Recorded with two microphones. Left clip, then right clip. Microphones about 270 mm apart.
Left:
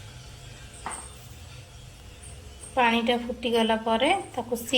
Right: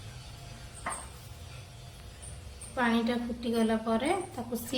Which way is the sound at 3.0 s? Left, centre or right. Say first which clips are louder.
Left 7 dB; left.